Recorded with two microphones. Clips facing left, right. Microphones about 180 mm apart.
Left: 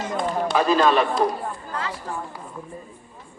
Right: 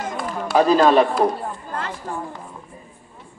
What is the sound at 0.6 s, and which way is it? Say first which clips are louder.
Speech: right 5 dB; 40° right (ahead or behind).